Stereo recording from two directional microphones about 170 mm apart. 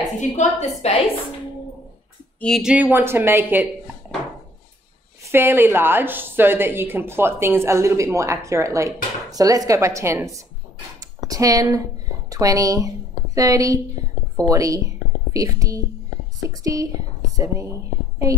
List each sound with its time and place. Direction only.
0.2 s a woman's voice: 45° left (ahead or behind)
2.4 s a woman's voice: centre (ahead or behind)
5.2 s a woman's voice: 15° right (ahead or behind)
11.0 s a sound: 20° right (ahead or behind)
12.3 s a woman's voice: 20° right (ahead or behind)